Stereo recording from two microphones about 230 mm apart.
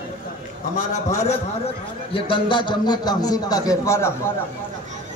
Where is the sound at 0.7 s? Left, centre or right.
Left; by 4.1 s centre.